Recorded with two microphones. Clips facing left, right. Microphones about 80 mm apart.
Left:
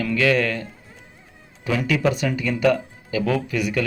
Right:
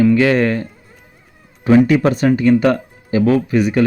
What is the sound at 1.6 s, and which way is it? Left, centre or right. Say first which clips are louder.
Speech: right 10 dB; right.